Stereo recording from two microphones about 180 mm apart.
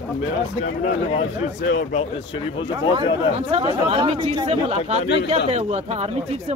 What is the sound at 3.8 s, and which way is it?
Speech, 35° right (ahead or behind).